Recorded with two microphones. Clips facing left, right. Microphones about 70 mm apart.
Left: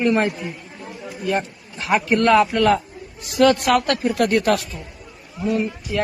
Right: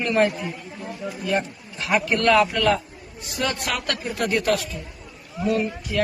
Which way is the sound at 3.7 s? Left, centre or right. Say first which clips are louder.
Left 8 dB; left.